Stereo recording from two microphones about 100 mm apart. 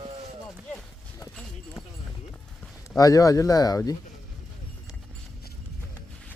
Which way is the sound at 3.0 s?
35° left (ahead or behind).